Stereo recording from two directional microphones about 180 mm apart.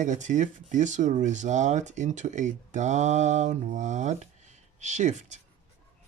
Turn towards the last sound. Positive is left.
turn(degrees=-40)  # may be behind; listen again after turning